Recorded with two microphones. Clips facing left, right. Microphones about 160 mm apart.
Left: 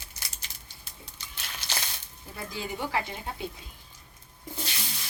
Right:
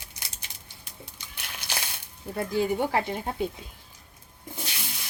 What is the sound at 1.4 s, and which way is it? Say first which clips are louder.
Crushing: right 1 dB; 10° right (ahead or behind).